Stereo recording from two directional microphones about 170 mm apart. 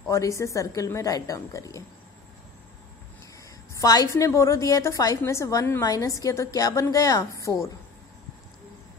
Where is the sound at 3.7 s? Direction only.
20° left (ahead or behind).